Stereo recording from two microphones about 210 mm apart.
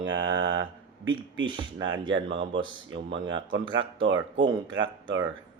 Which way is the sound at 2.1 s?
60° right (ahead or behind).